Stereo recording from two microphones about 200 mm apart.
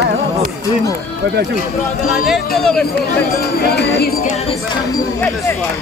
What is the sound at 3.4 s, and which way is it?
Speech, 55° left (ahead or behind).